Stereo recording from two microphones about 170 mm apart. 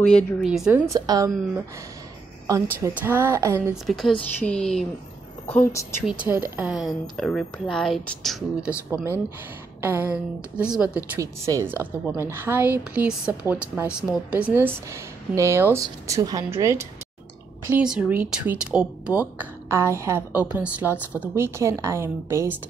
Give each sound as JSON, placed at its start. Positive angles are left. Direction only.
{"t": 0.1, "sound": "speech", "side_deg": 5}
{"t": 0.5, "sound": "speech", "side_deg": -5}
{"t": 0.9, "sound": "a woman's voice", "side_deg": -20}
{"t": 2.4, "sound": "a woman's voice", "side_deg": -20}
{"t": 3.7, "sound": "a woman's voice", "side_deg": 0}
{"t": 6.0, "sound": "speech", "side_deg": -10}
{"t": 9.8, "sound": "speech", "side_deg": -15}
{"t": 11.1, "sound": "speech", "side_deg": -20}